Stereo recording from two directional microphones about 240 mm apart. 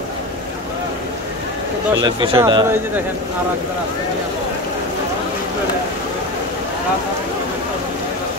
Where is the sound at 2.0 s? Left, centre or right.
Centre.